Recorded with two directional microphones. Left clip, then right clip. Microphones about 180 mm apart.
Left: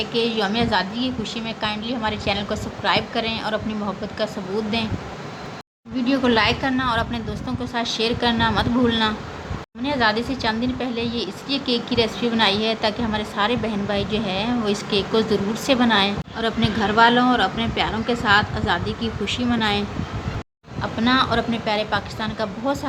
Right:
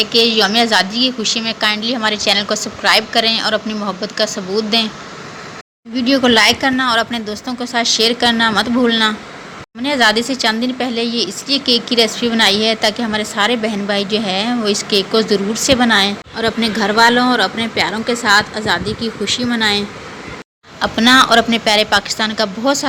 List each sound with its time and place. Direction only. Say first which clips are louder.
0.0 s a woman's voice: right 9 dB; 20° right (ahead or behind)
6.0 s a woman's voice: right 7 dB; 25° right (ahead or behind)
20.8 s a woman's voice: right 9 dB; 30° right (ahead or behind)